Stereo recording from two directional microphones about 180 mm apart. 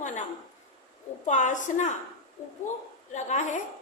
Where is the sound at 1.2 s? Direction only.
45° left (ahead or behind).